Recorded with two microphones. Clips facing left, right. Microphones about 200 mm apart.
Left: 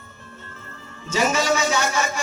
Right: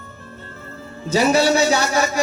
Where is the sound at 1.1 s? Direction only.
35° right (ahead or behind).